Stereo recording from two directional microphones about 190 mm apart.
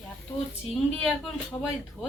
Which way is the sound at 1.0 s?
5° right (ahead or behind).